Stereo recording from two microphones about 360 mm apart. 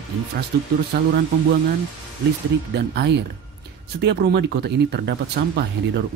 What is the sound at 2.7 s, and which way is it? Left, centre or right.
A man's voice, right.